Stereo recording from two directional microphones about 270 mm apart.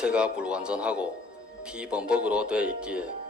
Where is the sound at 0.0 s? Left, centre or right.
Centre.